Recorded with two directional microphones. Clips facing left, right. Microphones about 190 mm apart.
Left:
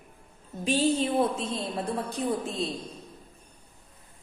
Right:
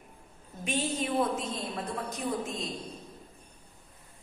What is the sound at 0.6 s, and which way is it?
A woman's voice, 30° left (ahead or behind).